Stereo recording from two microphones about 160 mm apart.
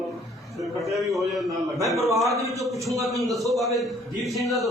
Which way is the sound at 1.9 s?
20° right (ahead or behind).